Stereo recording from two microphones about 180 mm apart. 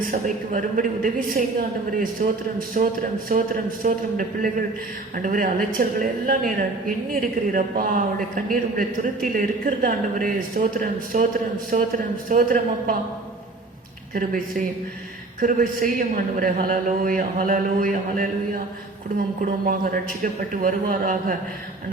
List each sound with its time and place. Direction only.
0.1 s a woman's voice: 50° right (ahead or behind)
14.1 s a woman's voice: 50° right (ahead or behind)